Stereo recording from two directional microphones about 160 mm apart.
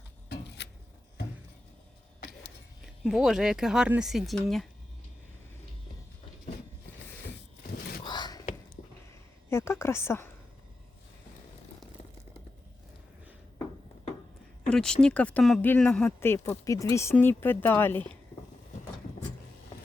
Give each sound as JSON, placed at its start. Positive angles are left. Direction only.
{"t": 0.3, "sound": "a sound", "side_deg": 90}
{"t": 3.0, "sound": "speech", "side_deg": -5}
{"t": 8.0, "sound": "whispering", "side_deg": 25}
{"t": 8.8, "sound": "a sound", "side_deg": 50}
{"t": 9.5, "sound": "a woman's voice", "side_deg": 15}
{"t": 14.7, "sound": "speech", "side_deg": 5}